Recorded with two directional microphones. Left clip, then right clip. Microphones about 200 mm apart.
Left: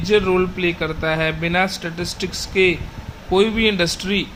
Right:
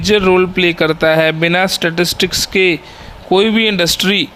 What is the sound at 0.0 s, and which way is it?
Speech, 50° right (ahead or behind).